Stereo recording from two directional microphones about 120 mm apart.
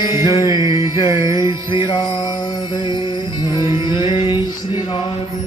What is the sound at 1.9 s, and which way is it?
Music, 35° left (ahead or behind).